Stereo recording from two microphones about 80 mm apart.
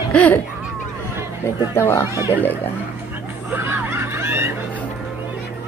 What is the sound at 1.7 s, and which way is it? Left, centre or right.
Speech, left.